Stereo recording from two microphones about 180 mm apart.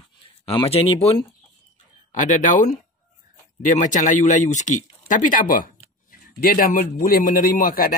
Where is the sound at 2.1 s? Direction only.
45° left (ahead or behind).